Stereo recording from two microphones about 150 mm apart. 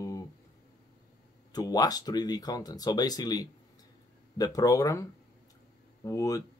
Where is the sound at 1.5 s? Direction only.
25° left (ahead or behind).